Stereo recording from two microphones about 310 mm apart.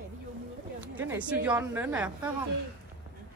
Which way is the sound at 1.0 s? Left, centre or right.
Centre.